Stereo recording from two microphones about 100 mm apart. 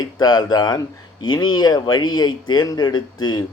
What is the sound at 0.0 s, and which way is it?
Speech, 45° left (ahead or behind).